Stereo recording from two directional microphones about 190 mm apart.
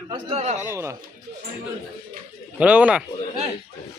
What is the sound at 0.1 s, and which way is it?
Speech, 30° right (ahead or behind).